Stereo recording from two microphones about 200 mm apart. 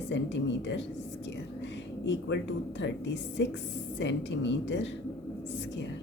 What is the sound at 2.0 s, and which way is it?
A woman's voice, 65° left (ahead or behind).